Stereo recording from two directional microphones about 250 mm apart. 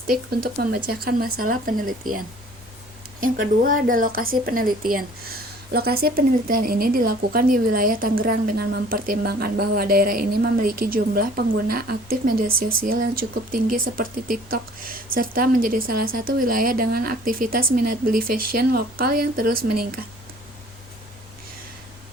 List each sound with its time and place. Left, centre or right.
0.1 s a woman's voice: right
3.2 s a woman's voice: right